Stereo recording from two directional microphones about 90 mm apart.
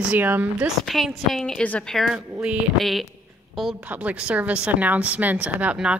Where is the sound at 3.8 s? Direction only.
15° right (ahead or behind).